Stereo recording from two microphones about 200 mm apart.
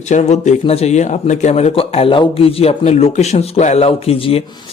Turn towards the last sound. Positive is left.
turn(degrees=30)  # may be behind; listen again after turning